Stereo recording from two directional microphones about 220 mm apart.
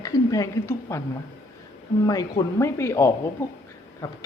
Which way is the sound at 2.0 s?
15° left (ahead or behind).